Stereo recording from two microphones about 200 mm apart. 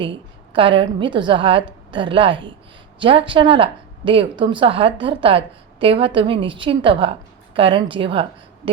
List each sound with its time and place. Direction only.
0.0 s a woman's voice: 25° right (ahead or behind)